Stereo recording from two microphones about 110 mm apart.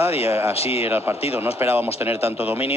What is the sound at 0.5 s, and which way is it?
Speech, 65° left (ahead or behind).